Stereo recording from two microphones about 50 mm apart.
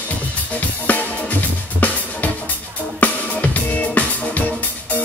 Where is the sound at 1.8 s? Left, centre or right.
Left.